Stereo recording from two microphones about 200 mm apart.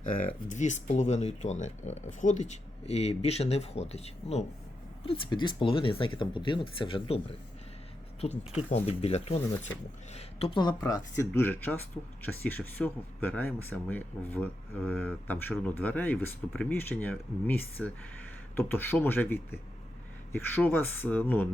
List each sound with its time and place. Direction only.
0.4 s speech: 35° left (ahead or behind)
11.2 s speech: 10° left (ahead or behind)